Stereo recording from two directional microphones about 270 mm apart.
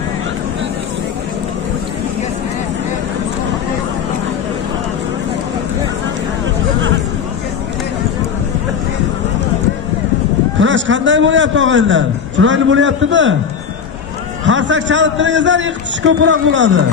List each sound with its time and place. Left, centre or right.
10.6 s a man's voice: right
14.4 s a man's voice: right